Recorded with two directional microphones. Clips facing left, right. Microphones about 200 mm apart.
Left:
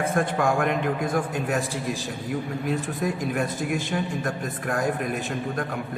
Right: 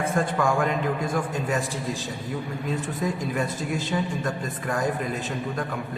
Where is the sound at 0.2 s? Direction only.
65° left (ahead or behind).